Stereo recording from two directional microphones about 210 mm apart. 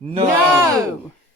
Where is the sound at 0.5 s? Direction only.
10° right (ahead or behind).